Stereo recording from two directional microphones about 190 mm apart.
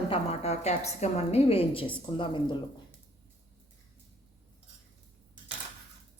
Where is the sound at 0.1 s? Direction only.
35° left (ahead or behind).